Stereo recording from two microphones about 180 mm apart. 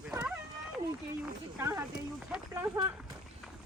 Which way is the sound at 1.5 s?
15° right (ahead or behind).